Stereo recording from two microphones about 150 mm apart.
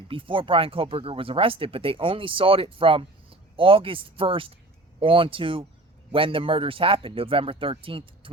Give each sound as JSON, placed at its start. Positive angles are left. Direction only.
{"t": 0.1, "sound": "speech", "side_deg": -35}